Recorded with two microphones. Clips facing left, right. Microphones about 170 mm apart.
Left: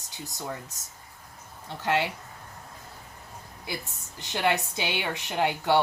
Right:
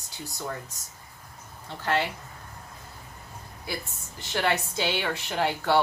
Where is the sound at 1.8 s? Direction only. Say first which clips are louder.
Even; 15° left (ahead or behind).